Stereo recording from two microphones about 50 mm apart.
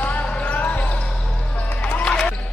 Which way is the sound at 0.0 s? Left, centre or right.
Left.